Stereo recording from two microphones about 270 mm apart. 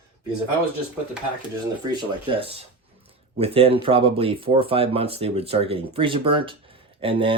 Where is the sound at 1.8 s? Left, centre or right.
Centre.